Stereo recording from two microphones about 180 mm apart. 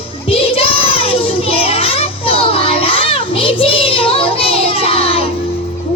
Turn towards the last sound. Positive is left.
turn(degrees=30)  # may be behind; listen again after turning